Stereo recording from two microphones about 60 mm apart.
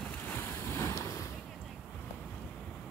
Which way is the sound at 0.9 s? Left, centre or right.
Left.